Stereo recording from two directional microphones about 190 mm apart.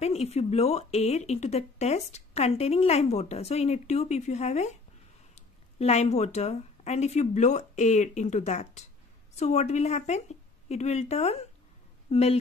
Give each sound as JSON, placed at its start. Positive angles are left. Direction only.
{"t": 0.0, "sound": "speech", "side_deg": 35}